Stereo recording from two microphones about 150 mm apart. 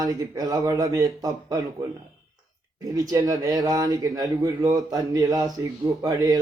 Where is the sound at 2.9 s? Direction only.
25° right (ahead or behind).